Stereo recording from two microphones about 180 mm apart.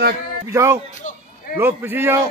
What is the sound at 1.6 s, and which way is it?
Speech, 10° right (ahead or behind).